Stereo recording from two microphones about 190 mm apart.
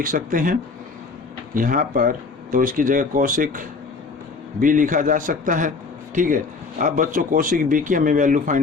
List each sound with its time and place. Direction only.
0.0 s speech: 45° right (ahead or behind)